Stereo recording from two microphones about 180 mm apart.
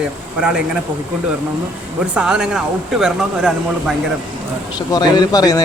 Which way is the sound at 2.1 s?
5° right (ahead or behind).